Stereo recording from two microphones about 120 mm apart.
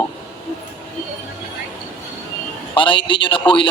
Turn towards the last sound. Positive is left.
turn(degrees=45)  # may be behind; listen again after turning